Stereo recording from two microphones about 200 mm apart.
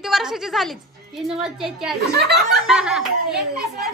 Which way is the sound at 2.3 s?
5° right (ahead or behind).